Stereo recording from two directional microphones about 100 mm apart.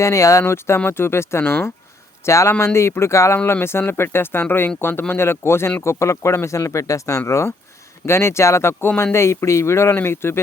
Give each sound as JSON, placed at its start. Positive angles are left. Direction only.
{"t": 0.0, "sound": "speech", "side_deg": 30}